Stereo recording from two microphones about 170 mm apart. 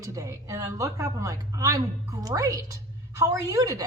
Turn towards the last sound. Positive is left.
turn(degrees=-20)  # may be behind; listen again after turning